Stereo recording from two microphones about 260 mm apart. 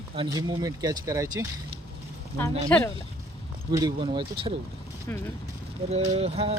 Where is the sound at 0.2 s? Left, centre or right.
Centre.